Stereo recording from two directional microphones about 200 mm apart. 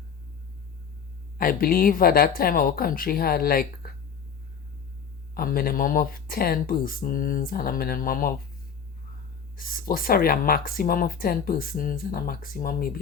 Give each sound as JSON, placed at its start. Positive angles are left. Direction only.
{"t": 1.4, "sound": "speech", "side_deg": 45}
{"t": 5.3, "sound": "speech", "side_deg": 45}
{"t": 9.6, "sound": "speech", "side_deg": 45}